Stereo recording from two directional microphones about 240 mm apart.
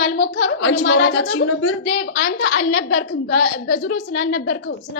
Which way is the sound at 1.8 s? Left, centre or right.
Left.